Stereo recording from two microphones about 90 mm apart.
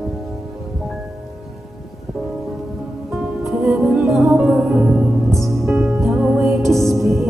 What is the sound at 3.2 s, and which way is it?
Music, 5° right (ahead or behind).